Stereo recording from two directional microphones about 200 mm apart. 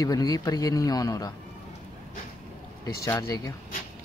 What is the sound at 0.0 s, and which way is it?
Speech, 20° left (ahead or behind).